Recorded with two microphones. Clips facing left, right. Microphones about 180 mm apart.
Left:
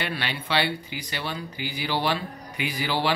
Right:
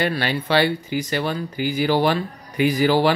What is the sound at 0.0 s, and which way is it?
Speech, 40° right (ahead or behind).